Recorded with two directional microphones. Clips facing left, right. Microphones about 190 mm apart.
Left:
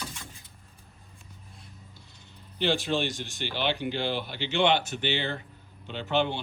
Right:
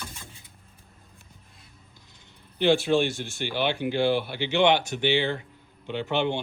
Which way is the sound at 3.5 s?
10° right (ahead or behind).